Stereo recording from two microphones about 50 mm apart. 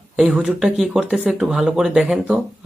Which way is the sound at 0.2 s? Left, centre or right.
Centre.